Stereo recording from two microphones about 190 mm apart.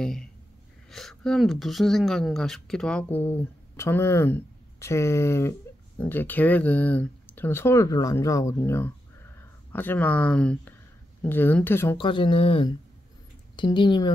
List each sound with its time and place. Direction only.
0.0 s speech: 5° left (ahead or behind)
12.0 s speech: 25° left (ahead or behind)